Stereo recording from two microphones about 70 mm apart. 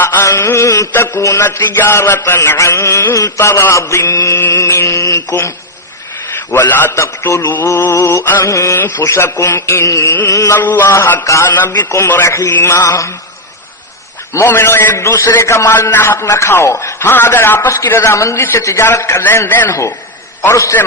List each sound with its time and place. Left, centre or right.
0.0 s mantra: left
0.9 s a man's voice: left
1.5 s a man's voice: left
2.6 s mantra: left
6.5 s a man's voice: left
10.2 s mantra: left
10.6 s a man's voice: left
12.6 s mantra: left
14.3 s a man's voice: left
17.7 s mantra: left
19.2 s a man's voice: left
20.4 s mantra: left